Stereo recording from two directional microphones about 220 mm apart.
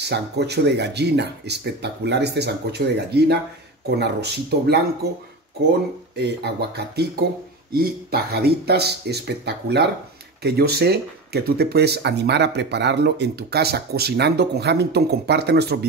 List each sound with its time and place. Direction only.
0.0 s speech: 50° right (ahead or behind)
7.7 s speech: 45° right (ahead or behind)